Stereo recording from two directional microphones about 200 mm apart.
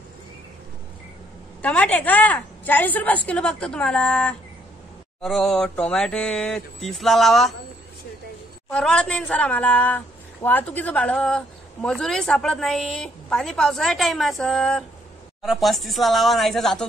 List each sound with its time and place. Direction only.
1.6 s a woman's voice: 5° left (ahead or behind)
8.6 s a woman's voice: 5° left (ahead or behind)